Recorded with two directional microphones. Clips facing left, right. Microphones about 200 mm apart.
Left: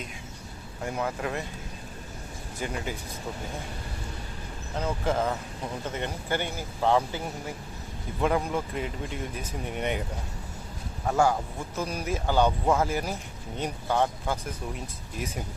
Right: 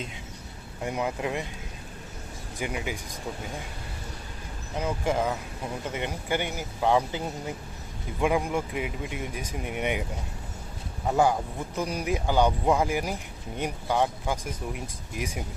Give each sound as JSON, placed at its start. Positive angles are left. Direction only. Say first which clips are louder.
{"t": 0.9, "sound": "speech", "louder": "right 1 dB", "side_deg": -15}
{"t": 2.6, "sound": "speech", "louder": "right 1 dB", "side_deg": -15}
{"t": 4.8, "sound": "speech", "louder": "right 1 dB", "side_deg": -10}
{"t": 11.0, "sound": "speech", "louder": "right 1 dB", "side_deg": -15}